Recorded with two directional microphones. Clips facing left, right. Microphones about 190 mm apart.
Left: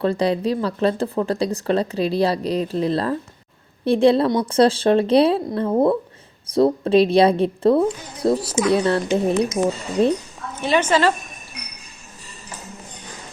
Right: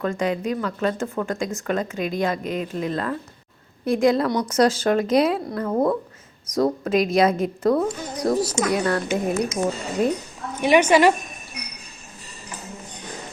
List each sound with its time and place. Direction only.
0.0 s a woman's voice: 35° left (ahead or behind)
10.6 s a woman's voice: 15° right (ahead or behind)